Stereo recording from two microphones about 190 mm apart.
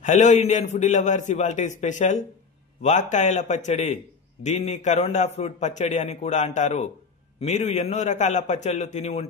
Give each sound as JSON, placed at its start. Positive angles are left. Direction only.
{"t": 0.0, "sound": "a man's voice", "side_deg": 40}